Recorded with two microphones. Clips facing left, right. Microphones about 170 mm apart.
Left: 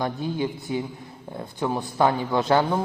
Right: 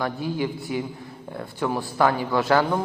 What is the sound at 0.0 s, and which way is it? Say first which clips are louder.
A man's voice: even; 20° left (ahead or behind).